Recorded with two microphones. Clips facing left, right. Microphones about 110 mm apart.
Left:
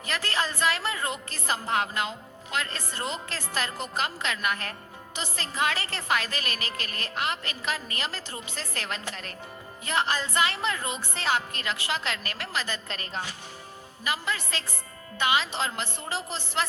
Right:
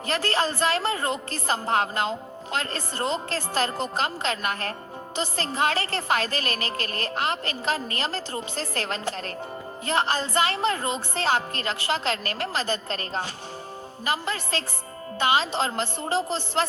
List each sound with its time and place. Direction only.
0.0 s a woman's voice: 35° right (ahead or behind)